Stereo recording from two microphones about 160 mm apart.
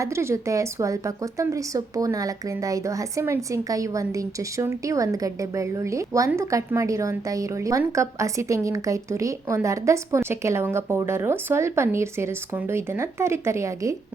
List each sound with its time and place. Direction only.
0.0 s speech: 15° right (ahead or behind)